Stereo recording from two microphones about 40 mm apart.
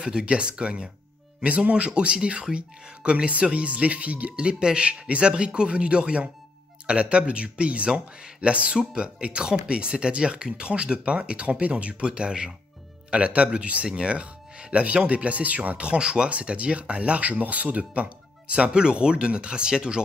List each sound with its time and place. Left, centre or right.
0.0 s speech: right
15.8 s speech: right